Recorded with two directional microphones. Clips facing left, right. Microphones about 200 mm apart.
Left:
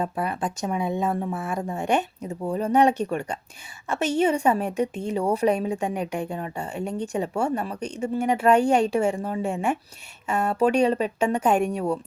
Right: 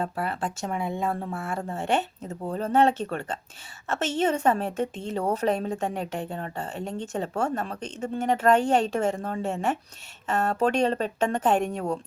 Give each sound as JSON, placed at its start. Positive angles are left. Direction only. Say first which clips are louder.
{"t": 0.0, "sound": "a woman's voice", "louder": "left 2 dB", "side_deg": 15}